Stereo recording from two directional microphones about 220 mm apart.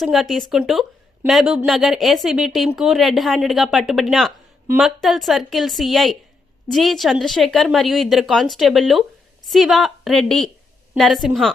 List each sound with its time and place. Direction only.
0.0 s a woman's voice: centre (ahead or behind)